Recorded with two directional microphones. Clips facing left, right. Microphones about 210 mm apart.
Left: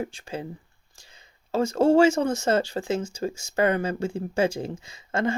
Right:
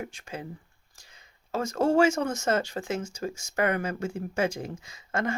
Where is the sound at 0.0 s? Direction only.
30° left (ahead or behind).